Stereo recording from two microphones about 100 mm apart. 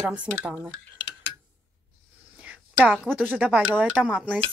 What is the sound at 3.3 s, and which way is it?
Speech, 15° right (ahead or behind).